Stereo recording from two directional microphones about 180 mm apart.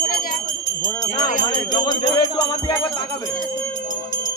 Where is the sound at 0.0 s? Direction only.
55° left (ahead or behind).